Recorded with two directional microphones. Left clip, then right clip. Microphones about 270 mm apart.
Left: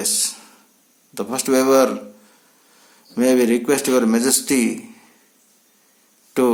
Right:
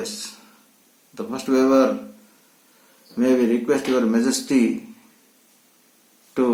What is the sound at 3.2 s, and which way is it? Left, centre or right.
Speech, left.